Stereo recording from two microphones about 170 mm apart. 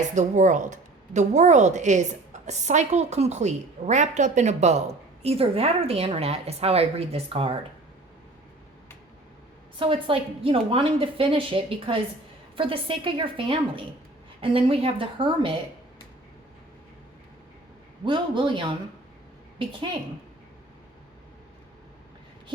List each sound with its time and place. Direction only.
0.1 s a woman's voice: 45° right (ahead or behind)
9.7 s a woman's voice: 30° right (ahead or behind)
18.0 s a man's voice: 30° right (ahead or behind)